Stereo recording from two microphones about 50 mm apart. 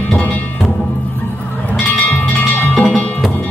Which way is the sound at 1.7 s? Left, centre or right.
Left.